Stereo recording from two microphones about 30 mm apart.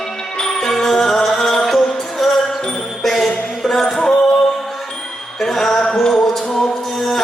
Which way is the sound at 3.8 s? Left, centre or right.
Centre.